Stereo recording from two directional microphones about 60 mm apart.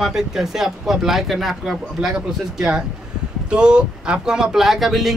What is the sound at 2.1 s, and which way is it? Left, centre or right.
Speech, centre.